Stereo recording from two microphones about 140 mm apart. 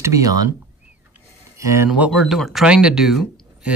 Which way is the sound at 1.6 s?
20° right (ahead or behind).